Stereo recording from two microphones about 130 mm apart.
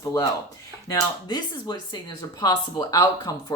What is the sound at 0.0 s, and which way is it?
Speech, 25° left (ahead or behind).